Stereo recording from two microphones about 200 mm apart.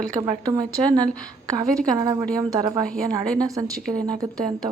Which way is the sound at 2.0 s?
20° right (ahead or behind).